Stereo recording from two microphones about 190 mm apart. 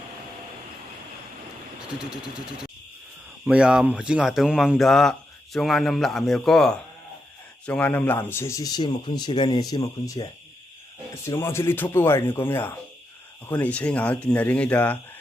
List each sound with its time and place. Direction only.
2.0 s a man's voice: 5° right (ahead or behind); by 10.2 s 20° left (ahead or behind)
11.3 s speech: 15° left (ahead or behind)